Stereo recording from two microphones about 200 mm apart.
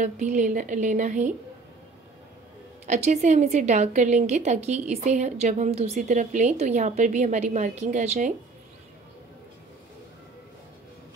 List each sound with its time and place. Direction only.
0.0 s a woman's voice: 35° right (ahead or behind)
2.9 s a woman's voice: 35° right (ahead or behind)